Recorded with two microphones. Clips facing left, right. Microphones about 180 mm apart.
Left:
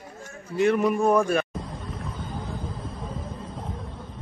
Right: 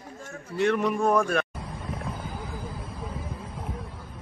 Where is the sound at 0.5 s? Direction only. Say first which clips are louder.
Left 3 dB; 5° left (ahead or behind).